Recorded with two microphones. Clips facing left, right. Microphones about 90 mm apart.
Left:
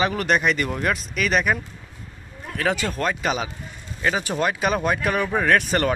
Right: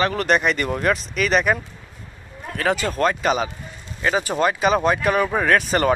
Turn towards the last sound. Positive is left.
turn(degrees=-5)  # may be behind; listen again after turning